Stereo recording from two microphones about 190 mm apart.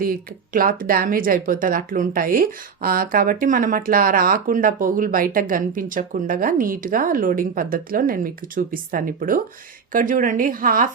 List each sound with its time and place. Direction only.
0.0 s speech: 50° right (ahead or behind)